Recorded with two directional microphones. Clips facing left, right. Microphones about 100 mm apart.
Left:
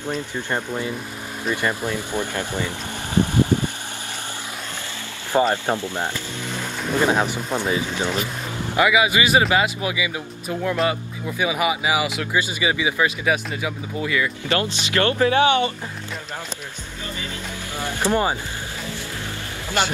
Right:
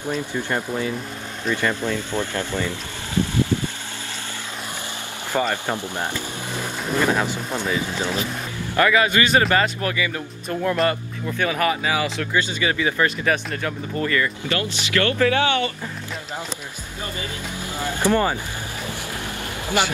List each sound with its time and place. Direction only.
0.0 s speech: 15° right (ahead or behind)
0.5 s speech: 15° left (ahead or behind)
5.3 s speech: 20° left (ahead or behind)
7.5 s speech: 20° left (ahead or behind)
10.6 s speech: centre (ahead or behind)
14.5 s speech: 30° left (ahead or behind)
17.8 s speech: 15° left (ahead or behind)